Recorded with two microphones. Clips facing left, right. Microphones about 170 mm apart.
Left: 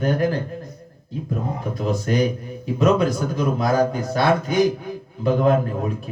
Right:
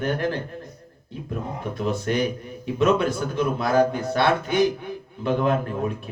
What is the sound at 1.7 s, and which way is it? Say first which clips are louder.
Speech: left 2 dB; 40° left (ahead or behind).